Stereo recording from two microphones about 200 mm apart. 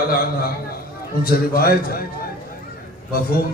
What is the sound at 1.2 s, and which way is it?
Speech, 50° left (ahead or behind).